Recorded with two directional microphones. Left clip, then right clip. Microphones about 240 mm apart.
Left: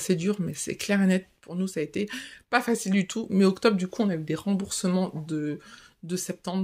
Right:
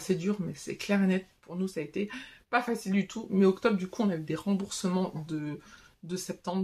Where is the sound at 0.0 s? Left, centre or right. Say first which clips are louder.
Left 4 dB; left.